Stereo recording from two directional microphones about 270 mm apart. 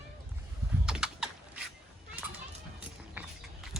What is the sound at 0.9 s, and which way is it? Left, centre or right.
Typing, centre.